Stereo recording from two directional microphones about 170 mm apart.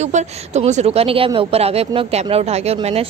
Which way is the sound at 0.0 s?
40° right (ahead or behind).